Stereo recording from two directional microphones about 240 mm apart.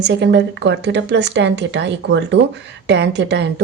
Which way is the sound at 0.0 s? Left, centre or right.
Right.